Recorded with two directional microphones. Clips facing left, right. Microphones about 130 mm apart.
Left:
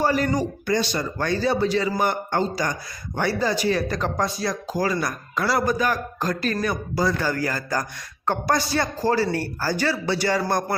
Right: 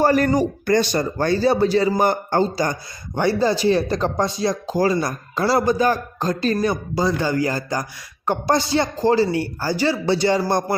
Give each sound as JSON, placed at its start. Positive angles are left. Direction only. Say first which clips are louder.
{"t": 0.0, "sound": "speech", "louder": "right 5 dB", "side_deg": -50}
{"t": 1.2, "sound": "speech", "louder": "right 4 dB", "side_deg": -35}